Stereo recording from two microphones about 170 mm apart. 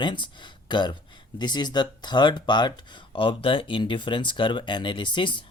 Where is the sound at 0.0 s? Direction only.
25° left (ahead or behind).